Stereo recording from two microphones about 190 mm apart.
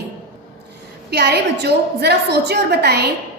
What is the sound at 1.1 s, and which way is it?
A woman's voice, 60° right (ahead or behind).